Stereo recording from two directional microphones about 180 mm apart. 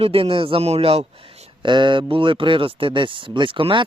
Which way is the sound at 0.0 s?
30° right (ahead or behind).